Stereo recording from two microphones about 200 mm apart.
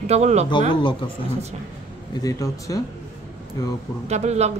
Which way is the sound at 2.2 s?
15° left (ahead or behind).